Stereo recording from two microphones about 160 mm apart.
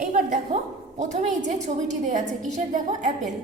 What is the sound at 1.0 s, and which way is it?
A woman's voice, 45° right (ahead or behind).